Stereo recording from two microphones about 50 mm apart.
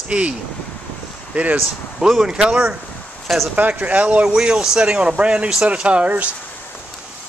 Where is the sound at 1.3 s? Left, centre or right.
Right.